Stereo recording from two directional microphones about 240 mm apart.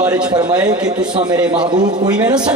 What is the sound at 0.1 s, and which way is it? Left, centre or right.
Speech, centre.